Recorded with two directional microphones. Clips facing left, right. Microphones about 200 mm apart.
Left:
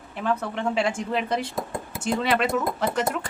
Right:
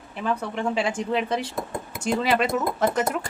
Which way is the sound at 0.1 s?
Centre (ahead or behind).